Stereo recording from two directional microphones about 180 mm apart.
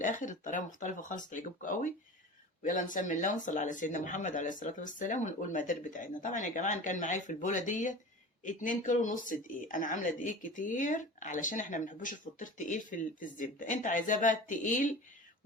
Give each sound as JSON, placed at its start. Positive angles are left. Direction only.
{"t": 0.0, "sound": "speech", "side_deg": 45}